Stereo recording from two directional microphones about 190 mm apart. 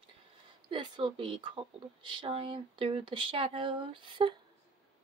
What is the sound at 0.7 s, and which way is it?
Speech, 25° right (ahead or behind).